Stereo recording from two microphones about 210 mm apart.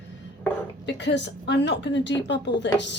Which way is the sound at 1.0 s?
55° left (ahead or behind).